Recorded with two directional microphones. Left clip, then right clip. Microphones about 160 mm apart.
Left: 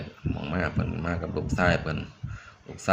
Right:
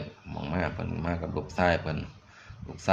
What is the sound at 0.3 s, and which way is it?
Speech, centre (ahead or behind).